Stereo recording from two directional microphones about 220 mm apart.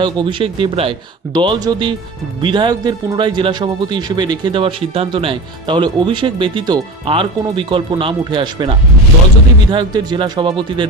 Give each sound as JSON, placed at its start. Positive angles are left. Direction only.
{"t": 0.0, "sound": "a man's voice", "side_deg": -20}
{"t": 9.7, "sound": "a man's voice", "side_deg": -20}